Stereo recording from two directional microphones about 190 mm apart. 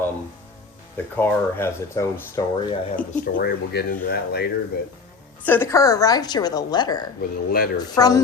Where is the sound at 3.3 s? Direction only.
55° left (ahead or behind).